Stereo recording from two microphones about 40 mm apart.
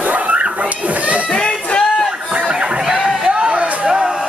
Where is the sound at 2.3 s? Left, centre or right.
Right.